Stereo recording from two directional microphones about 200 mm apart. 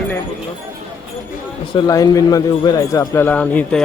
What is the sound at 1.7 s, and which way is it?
Speech, 15° left (ahead or behind).